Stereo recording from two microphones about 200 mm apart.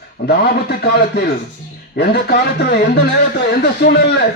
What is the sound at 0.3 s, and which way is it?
A man's voice, 55° left (ahead or behind).